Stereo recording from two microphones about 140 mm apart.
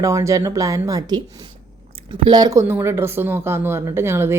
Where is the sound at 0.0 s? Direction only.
20° right (ahead or behind).